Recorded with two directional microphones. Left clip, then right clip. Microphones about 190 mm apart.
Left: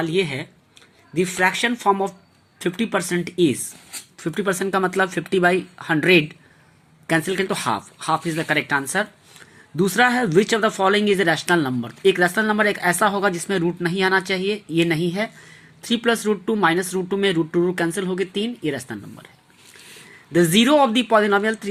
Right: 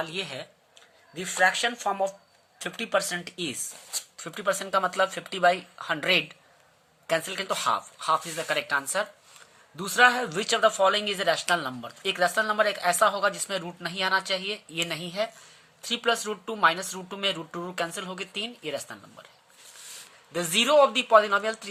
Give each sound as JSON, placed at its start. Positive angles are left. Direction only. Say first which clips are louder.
{"t": 0.0, "sound": "speech", "louder": "left 10 dB", "side_deg": 15}
{"t": 20.3, "sound": "speech", "louder": "left 5 dB", "side_deg": 15}